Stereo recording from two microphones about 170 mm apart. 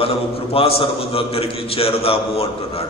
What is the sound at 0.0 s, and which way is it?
A man's voice, 35° left (ahead or behind).